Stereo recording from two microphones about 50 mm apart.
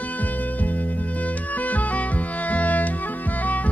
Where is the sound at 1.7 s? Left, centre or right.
Left.